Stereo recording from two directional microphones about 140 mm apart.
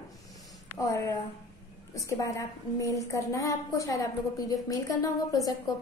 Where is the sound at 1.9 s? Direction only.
25° left (ahead or behind).